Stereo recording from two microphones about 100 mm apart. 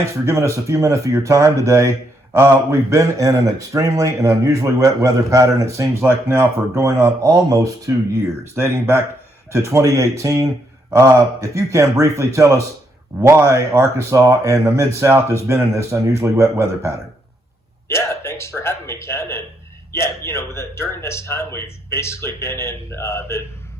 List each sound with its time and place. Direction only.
0.3 s speech: 30° right (ahead or behind)
17.8 s a man's voice: 25° left (ahead or behind)